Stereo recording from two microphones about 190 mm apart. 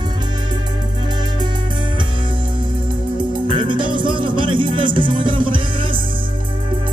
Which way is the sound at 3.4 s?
25° right (ahead or behind).